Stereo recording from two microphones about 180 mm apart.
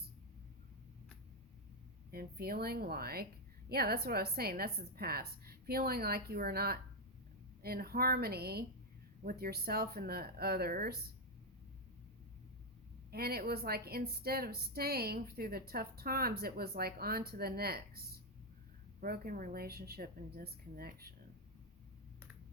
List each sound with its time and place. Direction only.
2.0 s a woman's voice: 55° right (ahead or behind)
13.1 s a woman's voice: 60° right (ahead or behind)